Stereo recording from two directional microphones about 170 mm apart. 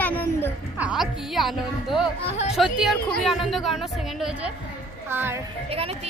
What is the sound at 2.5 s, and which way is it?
A woman's voice, centre (ahead or behind).